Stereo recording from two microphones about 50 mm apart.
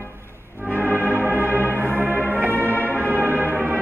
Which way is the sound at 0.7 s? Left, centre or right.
Right.